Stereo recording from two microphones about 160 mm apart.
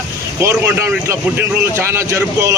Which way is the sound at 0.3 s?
15° right (ahead or behind).